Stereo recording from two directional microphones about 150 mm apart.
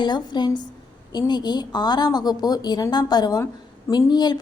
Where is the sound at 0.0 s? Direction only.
30° left (ahead or behind).